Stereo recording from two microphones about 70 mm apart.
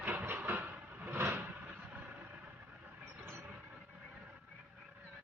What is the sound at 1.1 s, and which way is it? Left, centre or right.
Vehicle, right.